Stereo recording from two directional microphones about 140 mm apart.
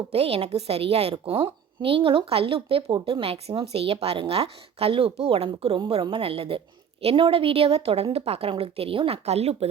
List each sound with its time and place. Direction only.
0.1 s a woman's voice: 45° right (ahead or behind)